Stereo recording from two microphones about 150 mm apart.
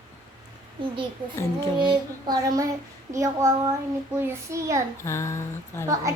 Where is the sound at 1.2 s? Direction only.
35° right (ahead or behind).